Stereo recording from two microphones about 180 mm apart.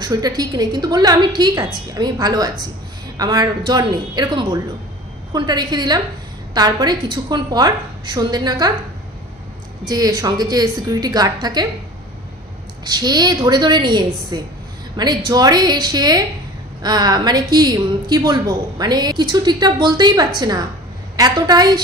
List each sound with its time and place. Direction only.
0.0 s a woman's voice: 20° right (ahead or behind)
9.8 s a woman's voice: 20° right (ahead or behind)
12.8 s a woman's voice: 20° right (ahead or behind)